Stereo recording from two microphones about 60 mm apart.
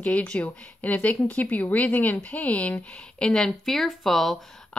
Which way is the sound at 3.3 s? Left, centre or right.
Centre.